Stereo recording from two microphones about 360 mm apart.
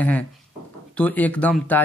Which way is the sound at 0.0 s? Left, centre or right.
Centre.